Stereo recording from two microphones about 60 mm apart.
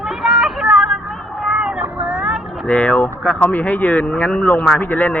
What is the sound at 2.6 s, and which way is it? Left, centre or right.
A man's voice, left.